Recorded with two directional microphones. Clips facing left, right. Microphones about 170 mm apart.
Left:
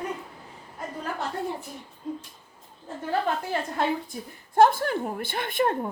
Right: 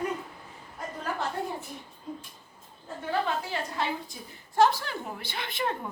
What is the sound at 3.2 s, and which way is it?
Speech, 50° left (ahead or behind).